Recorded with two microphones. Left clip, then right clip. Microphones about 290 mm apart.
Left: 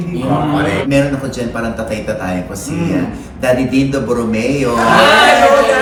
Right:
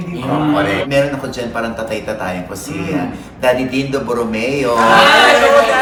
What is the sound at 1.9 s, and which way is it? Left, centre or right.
Speech, centre.